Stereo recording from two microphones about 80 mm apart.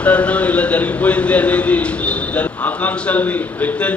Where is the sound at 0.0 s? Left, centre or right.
Centre.